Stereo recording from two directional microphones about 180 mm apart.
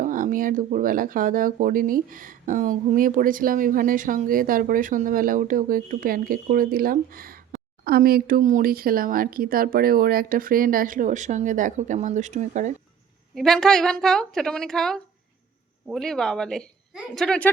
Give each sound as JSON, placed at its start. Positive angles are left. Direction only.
{"t": 0.0, "sound": "speech", "side_deg": -50}
{"t": 13.3, "sound": "a woman's voice", "side_deg": 0}